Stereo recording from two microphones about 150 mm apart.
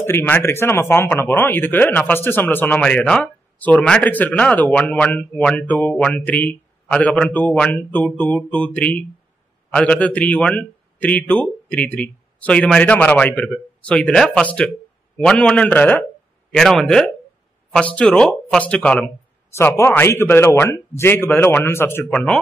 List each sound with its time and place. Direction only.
0.0 s speech: 15° left (ahead or behind)